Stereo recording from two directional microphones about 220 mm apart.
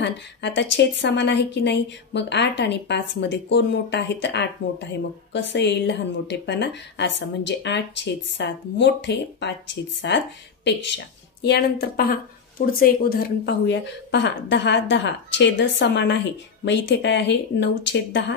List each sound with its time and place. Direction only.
0.0 s a woman's voice: 55° left (ahead or behind)
13.7 s a woman's voice: 55° left (ahead or behind)